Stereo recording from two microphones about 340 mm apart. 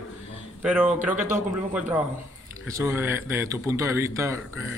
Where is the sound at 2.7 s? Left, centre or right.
Centre.